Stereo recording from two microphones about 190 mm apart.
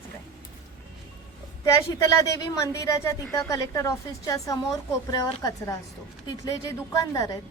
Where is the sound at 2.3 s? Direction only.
20° left (ahead or behind).